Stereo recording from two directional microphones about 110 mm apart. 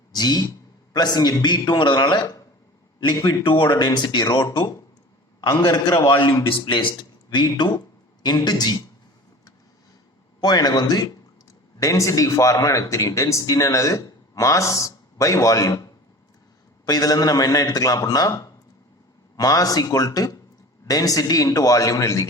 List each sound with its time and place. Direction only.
0.1 s a man's voice: 40° left (ahead or behind)
6.1 s a man's voice: 45° left (ahead or behind)
10.4 s a man's voice: 40° left (ahead or behind)